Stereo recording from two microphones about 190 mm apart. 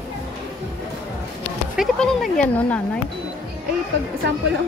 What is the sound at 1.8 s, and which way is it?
Speech, 5° left (ahead or behind).